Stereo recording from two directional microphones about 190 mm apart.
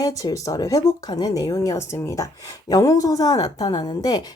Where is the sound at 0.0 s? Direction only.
20° left (ahead or behind).